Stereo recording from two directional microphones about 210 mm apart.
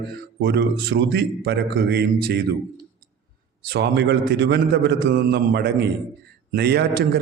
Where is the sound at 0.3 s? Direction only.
50° right (ahead or behind).